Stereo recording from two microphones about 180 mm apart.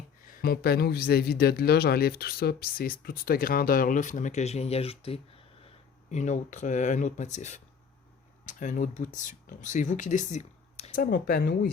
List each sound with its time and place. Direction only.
0.3 s speech: 60° left (ahead or behind); by 10.9 s 40° left (ahead or behind)
10.9 s speech: 55° left (ahead or behind)